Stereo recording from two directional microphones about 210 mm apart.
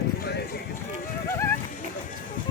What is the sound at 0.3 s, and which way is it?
Run, 50° left (ahead or behind).